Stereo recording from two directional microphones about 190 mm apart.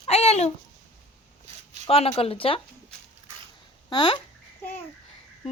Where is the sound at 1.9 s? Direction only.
30° left (ahead or behind).